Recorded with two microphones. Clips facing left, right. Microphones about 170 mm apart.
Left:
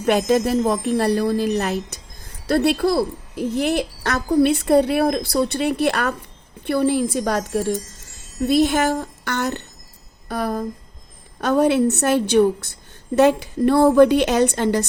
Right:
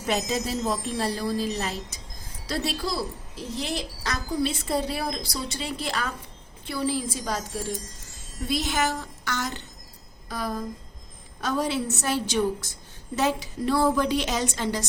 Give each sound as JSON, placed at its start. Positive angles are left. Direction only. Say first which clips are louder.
{"t": 0.0, "sound": "a woman's voice", "louder": "left 10 dB", "side_deg": 60}